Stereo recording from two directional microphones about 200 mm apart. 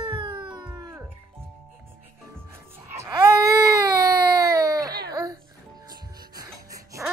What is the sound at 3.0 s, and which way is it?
Baby cry, 15° right (ahead or behind).